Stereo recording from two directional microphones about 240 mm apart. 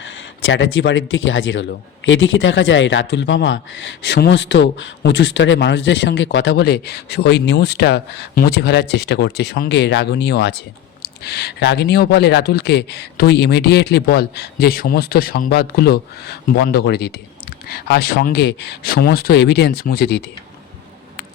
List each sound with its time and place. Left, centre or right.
0.0 s speech: left
6.6 s speech: left